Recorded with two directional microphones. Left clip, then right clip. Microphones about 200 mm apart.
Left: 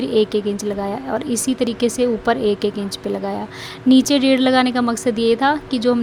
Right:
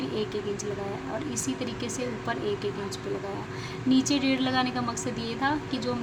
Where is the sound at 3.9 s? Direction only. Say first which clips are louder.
Left 11 dB; 50° left (ahead or behind).